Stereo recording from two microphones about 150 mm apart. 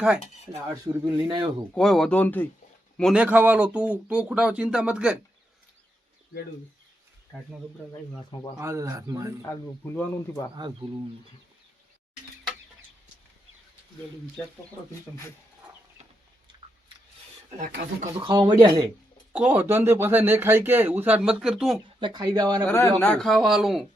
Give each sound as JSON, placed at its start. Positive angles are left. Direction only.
{"t": 0.9, "sound": "speech", "side_deg": -30}
{"t": 1.7, "sound": "speech", "side_deg": 5}
{"t": 3.0, "sound": "speech", "side_deg": -5}
{"t": 8.5, "sound": "speech", "side_deg": -20}
{"t": 9.4, "sound": "speech", "side_deg": 15}
{"t": 18.2, "sound": "speech", "side_deg": -30}
{"t": 19.3, "sound": "speech", "side_deg": -10}
{"t": 22.0, "sound": "speech", "side_deg": -30}
{"t": 22.6, "sound": "speech", "side_deg": 15}